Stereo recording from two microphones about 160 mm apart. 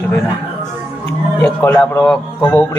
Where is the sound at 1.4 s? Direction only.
15° left (ahead or behind).